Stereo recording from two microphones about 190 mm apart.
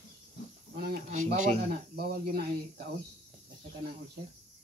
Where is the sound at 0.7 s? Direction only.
55° right (ahead or behind).